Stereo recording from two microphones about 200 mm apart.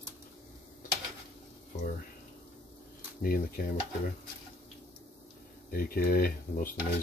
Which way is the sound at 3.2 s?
50° left (ahead or behind).